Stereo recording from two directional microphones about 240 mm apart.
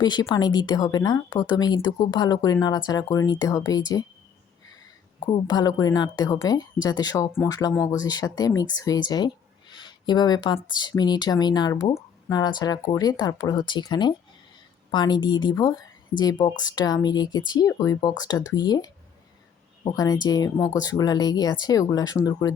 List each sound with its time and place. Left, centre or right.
0.0 s speech: centre
5.2 s speech: centre
19.9 s speech: centre